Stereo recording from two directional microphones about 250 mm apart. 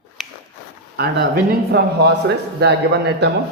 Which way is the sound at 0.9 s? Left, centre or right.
Right.